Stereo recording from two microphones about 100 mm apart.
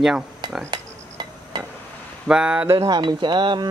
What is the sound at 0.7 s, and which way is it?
Dishes, 50° right (ahead or behind).